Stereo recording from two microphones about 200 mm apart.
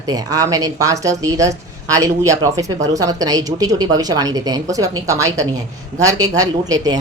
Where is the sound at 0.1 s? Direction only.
15° right (ahead or behind).